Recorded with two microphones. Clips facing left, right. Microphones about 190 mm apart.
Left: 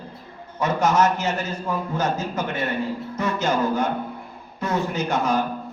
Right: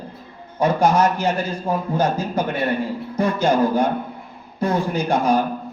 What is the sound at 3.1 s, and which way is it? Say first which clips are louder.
Speech: right 6 dB; 30° right (ahead or behind).